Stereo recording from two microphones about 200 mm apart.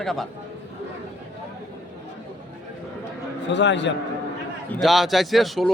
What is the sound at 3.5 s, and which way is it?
Speech, 60° left (ahead or behind).